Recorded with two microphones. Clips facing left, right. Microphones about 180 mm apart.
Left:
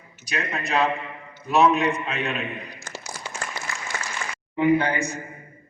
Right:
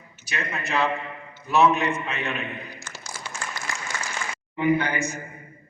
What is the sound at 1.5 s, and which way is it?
Speech, 30° left (ahead or behind).